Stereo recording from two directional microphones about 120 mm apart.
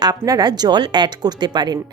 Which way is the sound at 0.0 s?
30° right (ahead or behind).